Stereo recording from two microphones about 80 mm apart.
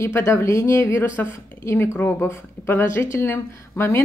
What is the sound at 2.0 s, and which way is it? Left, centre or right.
Speech, left.